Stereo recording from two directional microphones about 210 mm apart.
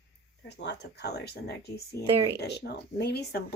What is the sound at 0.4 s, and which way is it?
A woman's voice, 55° left (ahead or behind).